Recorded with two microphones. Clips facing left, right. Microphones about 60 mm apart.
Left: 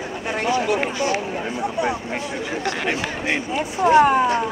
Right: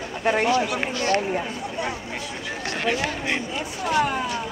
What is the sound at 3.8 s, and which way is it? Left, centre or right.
Speech, left.